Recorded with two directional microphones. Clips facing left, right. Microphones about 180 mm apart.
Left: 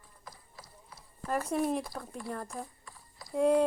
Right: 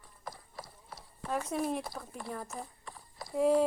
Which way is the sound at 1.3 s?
Centre (ahead or behind).